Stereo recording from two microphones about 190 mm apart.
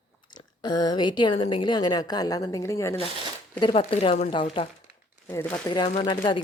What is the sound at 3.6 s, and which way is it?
Speech, 30° left (ahead or behind).